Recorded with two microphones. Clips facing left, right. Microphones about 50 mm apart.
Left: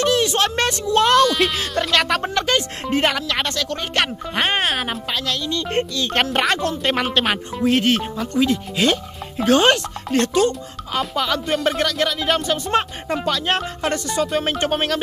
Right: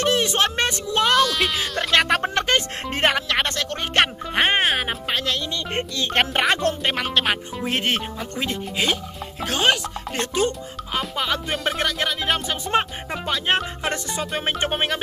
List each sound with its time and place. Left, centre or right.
0.0 s a sound: right
1.0 s speech: centre
1.9 s speech: right
4.5 s speech: centre
5.1 s speech: right
7.0 s speech: centre
7.6 s speech: right
8.8 s speech: centre
10.1 s speech: centre
11.5 s speech: centre
11.8 s speech: centre